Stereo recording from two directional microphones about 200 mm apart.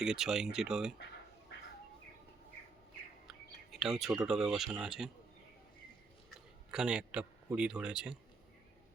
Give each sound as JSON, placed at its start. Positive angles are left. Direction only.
{"t": 0.0, "sound": "a man's voice", "side_deg": 0}
{"t": 1.5, "sound": "bird", "side_deg": 60}
{"t": 3.2, "sound": "a sound", "side_deg": 0}
{"t": 4.2, "sound": "a man's voice", "side_deg": 0}
{"t": 6.7, "sound": "a man's voice", "side_deg": -5}